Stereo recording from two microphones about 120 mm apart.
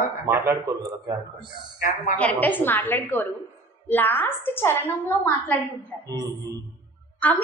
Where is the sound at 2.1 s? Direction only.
15° left (ahead or behind).